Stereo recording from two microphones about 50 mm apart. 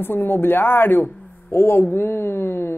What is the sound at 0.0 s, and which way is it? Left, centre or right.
Speech, left.